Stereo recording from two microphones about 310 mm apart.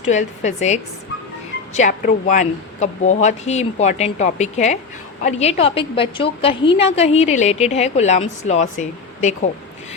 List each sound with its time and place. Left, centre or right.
0.0 s a woman's voice: left